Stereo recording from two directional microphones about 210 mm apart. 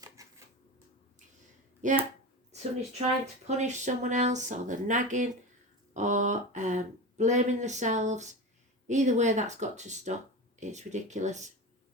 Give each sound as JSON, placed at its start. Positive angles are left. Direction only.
{"t": 0.0, "sound": "typewriter", "side_deg": -15}
{"t": 1.8, "sound": "speech", "side_deg": -35}
{"t": 3.4, "sound": "speech", "side_deg": -35}